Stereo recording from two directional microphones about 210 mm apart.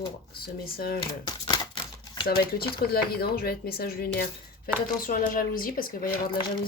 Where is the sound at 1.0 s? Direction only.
20° left (ahead or behind).